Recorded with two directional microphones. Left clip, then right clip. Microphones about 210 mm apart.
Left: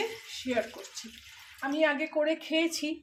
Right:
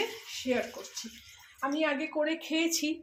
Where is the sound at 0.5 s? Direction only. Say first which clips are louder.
Even; 5° right (ahead or behind).